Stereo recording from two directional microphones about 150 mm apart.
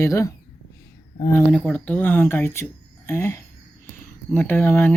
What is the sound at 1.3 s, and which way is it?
Speech, 5° left (ahead or behind).